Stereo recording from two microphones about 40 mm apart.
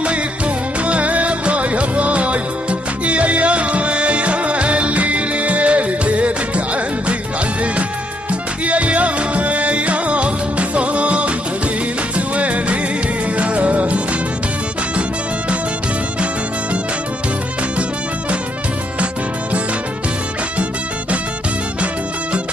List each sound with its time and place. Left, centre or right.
0.8 s music: right
8.3 s music: right
12.4 s music: right